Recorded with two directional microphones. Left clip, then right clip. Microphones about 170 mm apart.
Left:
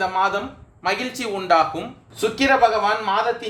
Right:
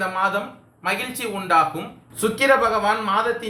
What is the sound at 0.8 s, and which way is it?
A man's voice, 45° left (ahead or behind).